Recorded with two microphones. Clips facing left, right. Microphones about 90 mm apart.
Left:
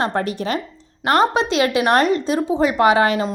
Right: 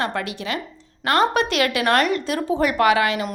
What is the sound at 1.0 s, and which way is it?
A woman's voice, 25° left (ahead or behind).